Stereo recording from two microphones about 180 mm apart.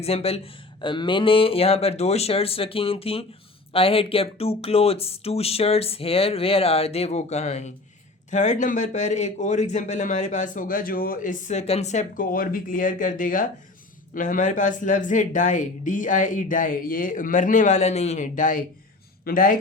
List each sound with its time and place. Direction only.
0.0 s speech: 35° left (ahead or behind); by 19.5 s 50° left (ahead or behind)